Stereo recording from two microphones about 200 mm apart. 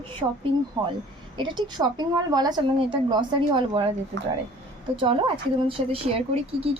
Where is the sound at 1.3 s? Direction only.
25° right (ahead or behind).